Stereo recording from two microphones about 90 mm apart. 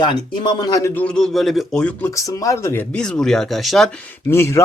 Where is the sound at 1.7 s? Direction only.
15° left (ahead or behind).